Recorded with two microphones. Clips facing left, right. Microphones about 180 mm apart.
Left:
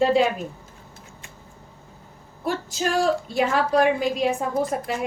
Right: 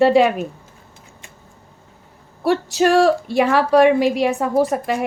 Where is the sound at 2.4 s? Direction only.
75° right (ahead or behind).